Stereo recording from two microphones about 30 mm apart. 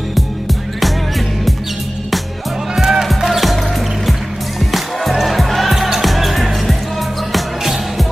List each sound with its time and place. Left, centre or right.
2.7 s music: centre
3.3 s music: centre
4.6 s music: centre